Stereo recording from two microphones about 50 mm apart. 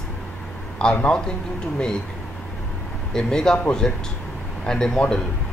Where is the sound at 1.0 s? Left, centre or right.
Centre.